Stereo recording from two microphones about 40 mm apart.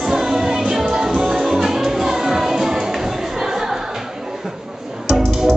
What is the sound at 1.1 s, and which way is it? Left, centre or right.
Music, right.